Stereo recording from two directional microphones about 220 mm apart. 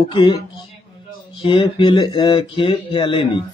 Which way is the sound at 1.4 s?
25° left (ahead or behind).